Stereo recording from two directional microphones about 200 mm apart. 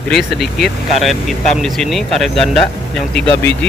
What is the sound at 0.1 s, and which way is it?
Speech, centre (ahead or behind).